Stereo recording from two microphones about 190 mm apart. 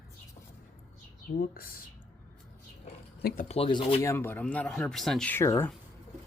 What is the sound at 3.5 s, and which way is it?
Speech, 25° left (ahead or behind).